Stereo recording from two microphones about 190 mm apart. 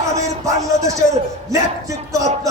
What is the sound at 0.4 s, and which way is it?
A man's voice, 15° right (ahead or behind).